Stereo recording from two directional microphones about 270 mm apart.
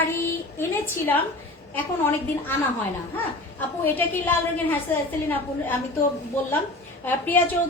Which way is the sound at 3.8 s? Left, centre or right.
Centre.